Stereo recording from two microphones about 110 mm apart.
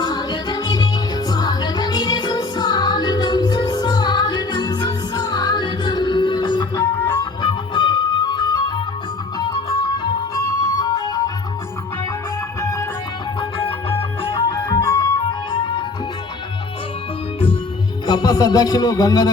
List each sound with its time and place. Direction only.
0.0 s music: 40° left (ahead or behind)
12.6 s music: 25° left (ahead or behind)
14.3 s music: 40° left (ahead or behind)
18.0 s music: 40° left (ahead or behind)